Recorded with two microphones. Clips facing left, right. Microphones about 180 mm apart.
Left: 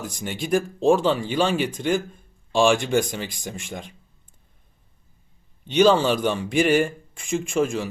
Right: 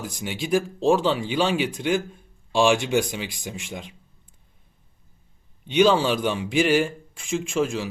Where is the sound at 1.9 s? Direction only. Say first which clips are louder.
Left 1 dB; 10° right (ahead or behind).